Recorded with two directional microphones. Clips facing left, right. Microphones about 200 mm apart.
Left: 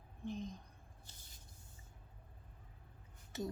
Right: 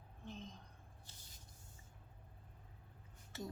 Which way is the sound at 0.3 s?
15° left (ahead or behind).